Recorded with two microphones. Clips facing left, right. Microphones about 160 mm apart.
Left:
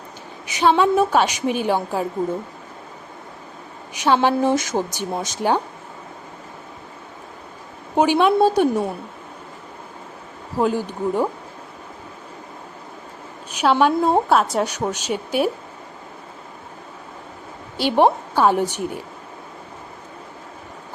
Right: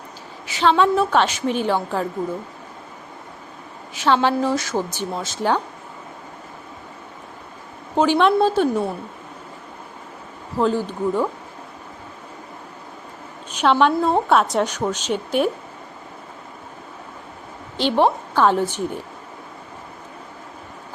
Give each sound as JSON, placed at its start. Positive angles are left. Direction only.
{"t": 0.4, "sound": "a woman's voice", "side_deg": 15}
{"t": 3.9, "sound": "a woman's voice", "side_deg": 15}
{"t": 7.9, "sound": "a woman's voice", "side_deg": 15}
{"t": 10.6, "sound": "a woman's voice", "side_deg": 15}
{"t": 13.6, "sound": "a woman's voice", "side_deg": 10}
{"t": 17.7, "sound": "a woman's voice", "side_deg": 15}